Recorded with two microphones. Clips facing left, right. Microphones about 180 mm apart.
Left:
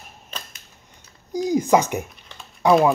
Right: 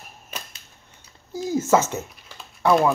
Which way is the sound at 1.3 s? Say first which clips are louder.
Left 2 dB; 15° left (ahead or behind).